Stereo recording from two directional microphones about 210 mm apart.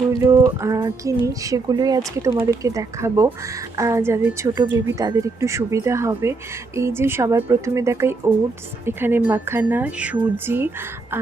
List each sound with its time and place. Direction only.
0.1 s speech: 15° right (ahead or behind)